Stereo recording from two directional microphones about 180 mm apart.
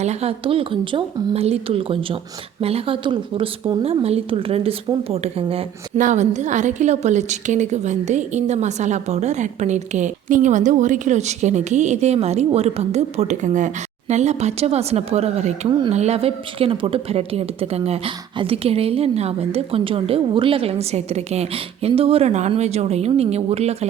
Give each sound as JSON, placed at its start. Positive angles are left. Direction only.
{"t": 0.0, "sound": "a woman's voice", "side_deg": -35}